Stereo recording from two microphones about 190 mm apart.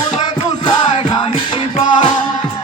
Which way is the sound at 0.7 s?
25° left (ahead or behind).